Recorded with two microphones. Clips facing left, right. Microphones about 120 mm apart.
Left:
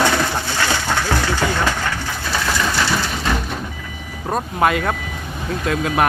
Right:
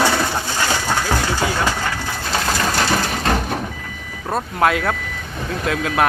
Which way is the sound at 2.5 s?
45° right (ahead or behind).